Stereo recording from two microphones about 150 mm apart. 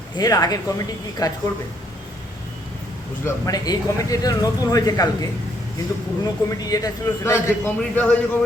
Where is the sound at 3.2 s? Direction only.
25° left (ahead or behind).